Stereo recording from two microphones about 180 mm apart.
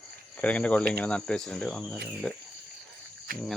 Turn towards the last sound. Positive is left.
turn(degrees=-50)  # may be behind; listen again after turning